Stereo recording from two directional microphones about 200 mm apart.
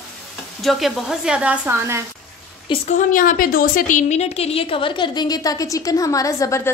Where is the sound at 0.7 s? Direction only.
Centre (ahead or behind).